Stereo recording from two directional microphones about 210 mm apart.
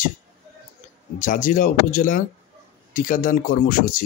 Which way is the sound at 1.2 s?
40° left (ahead or behind).